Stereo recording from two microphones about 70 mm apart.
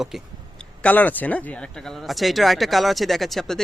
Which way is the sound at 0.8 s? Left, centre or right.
Left.